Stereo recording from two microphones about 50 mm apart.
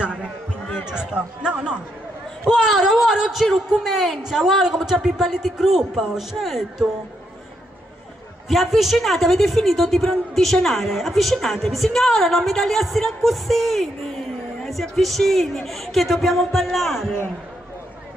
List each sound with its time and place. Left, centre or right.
0.0 s a man's voice: right
2.5 s a woman's voice: centre
8.5 s a woman's voice: centre